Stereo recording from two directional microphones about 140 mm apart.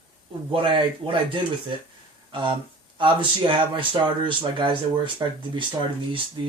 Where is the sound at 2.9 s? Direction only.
35° right (ahead or behind).